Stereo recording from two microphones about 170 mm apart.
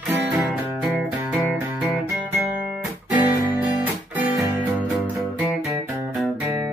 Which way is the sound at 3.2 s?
10° right (ahead or behind).